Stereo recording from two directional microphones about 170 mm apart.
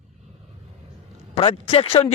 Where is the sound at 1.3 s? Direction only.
35° left (ahead or behind).